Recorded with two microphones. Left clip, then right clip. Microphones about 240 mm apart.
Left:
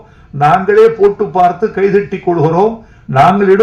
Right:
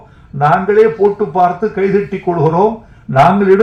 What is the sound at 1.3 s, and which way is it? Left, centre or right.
A man's voice, left.